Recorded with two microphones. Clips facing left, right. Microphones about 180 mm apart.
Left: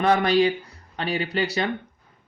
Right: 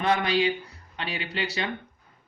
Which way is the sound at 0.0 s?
40° left (ahead or behind).